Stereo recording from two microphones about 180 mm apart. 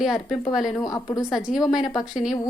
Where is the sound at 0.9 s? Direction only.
20° left (ahead or behind).